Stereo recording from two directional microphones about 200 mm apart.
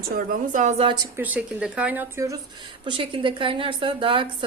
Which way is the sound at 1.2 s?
5° right (ahead or behind).